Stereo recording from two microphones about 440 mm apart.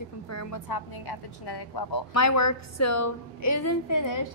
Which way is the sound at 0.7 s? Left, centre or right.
Left.